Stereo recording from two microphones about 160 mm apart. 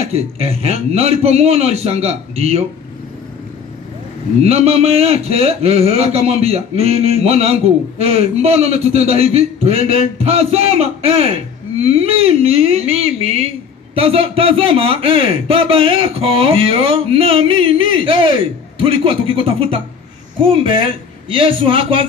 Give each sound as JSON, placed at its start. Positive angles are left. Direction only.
{"t": 0.0, "sound": "a man's voice", "side_deg": -40}
{"t": 4.4, "sound": "a man's voice", "side_deg": -40}